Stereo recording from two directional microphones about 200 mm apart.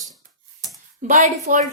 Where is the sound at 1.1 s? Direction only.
40° right (ahead or behind).